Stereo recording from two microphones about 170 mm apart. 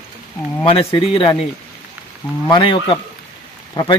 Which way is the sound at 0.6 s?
30° left (ahead or behind).